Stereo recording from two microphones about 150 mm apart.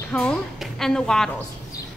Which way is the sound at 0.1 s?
5° left (ahead or behind).